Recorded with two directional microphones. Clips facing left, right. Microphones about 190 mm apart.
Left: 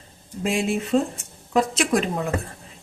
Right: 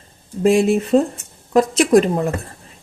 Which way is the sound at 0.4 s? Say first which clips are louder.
Right 9 dB; 40° right (ahead or behind).